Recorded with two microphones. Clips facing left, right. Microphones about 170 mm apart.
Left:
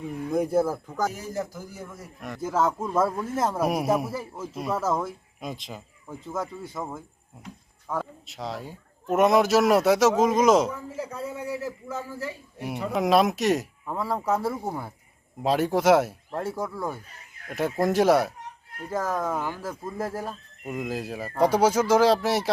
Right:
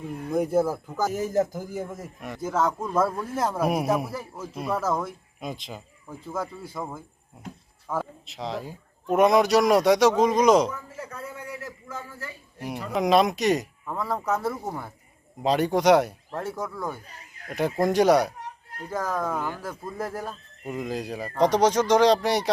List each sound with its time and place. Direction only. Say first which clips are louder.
0.1 s speech: even; centre (ahead or behind)
1.4 s a man's voice: right 8 dB; 50° right (ahead or behind)
2.2 s speech: left 1 dB; centre (ahead or behind)
10.7 s a man's voice: left 3 dB; 25° left (ahead or behind)
11.9 s speech: left 5 dB; 5° left (ahead or behind)